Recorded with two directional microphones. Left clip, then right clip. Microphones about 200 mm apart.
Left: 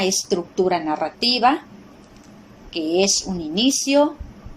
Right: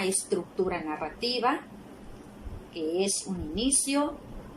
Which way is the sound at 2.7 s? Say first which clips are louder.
Left 10 dB; 45° left (ahead or behind).